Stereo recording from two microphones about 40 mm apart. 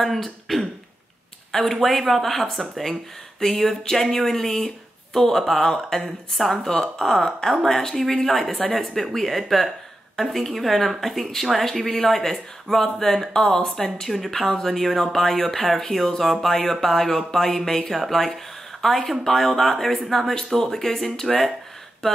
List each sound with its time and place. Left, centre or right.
0.0 s speech: centre
13.3 s speech: centre
22.0 s a sound: centre